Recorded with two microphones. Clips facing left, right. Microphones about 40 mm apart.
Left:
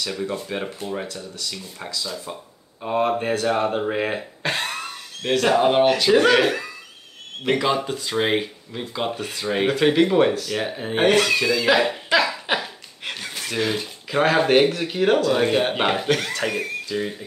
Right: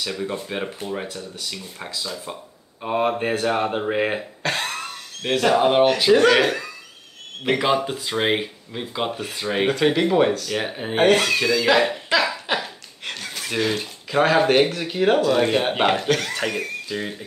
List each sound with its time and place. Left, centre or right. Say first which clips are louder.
0.0 s speech: even; centre
1.9 s speech: left 1 dB; centre
4.2 s cough: even; centre
5.3 s speech: even; centre
7.7 s speech: right 1 dB; centre
9.8 s speech: left 2 dB; centre
10.5 s speech: even; centre
11.0 s speech: right 1 dB; centre
12.5 s chuckle: even; centre
13.6 s speech: right 1 dB; centre